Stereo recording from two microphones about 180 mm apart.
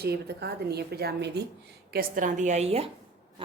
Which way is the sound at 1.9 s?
55° right (ahead or behind).